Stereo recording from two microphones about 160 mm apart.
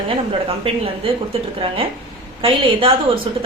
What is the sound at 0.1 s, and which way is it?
A woman's voice, 35° right (ahead or behind).